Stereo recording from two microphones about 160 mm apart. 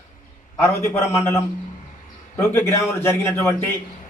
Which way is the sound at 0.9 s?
15° left (ahead or behind).